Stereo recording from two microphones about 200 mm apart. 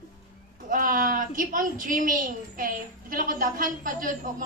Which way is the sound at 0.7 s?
45° right (ahead or behind).